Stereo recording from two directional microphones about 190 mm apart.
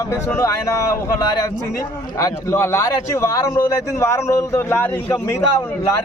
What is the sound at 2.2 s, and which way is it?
A man's voice, 15° left (ahead or behind).